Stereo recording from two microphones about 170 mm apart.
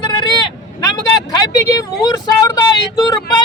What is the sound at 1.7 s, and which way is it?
Vehicle, 20° left (ahead or behind).